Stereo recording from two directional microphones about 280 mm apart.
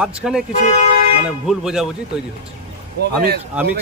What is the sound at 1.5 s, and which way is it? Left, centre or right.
Speech, centre.